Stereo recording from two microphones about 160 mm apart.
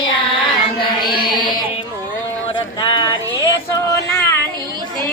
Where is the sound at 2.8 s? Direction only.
25° left (ahead or behind).